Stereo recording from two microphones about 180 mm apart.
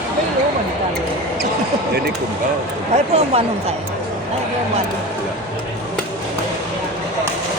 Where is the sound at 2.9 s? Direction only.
35° right (ahead or behind).